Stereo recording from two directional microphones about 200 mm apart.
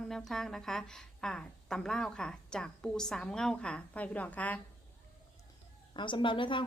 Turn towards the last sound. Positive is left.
turn(degrees=25)  # may be behind; listen again after turning